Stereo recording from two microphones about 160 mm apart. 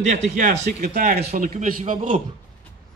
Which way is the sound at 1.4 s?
60° right (ahead or behind).